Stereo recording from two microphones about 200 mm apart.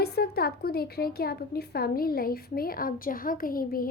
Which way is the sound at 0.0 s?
50° left (ahead or behind).